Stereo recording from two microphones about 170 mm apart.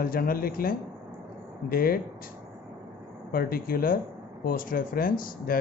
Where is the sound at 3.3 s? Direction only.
60° left (ahead or behind).